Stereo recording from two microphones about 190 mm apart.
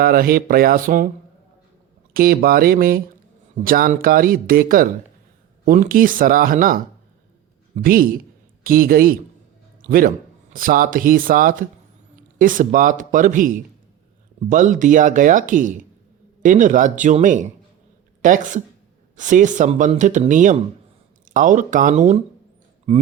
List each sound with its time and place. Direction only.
0.0 s speech: 50° right (ahead or behind)
2.1 s a man's voice: 50° right (ahead or behind); by 23.0 s 35° right (ahead or behind)